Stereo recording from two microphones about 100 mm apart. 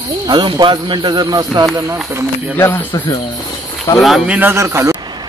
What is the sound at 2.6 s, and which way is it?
Speech, 20° left (ahead or behind).